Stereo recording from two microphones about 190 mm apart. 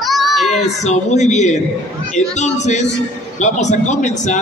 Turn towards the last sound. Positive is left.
turn(degrees=40)  # may be behind; listen again after turning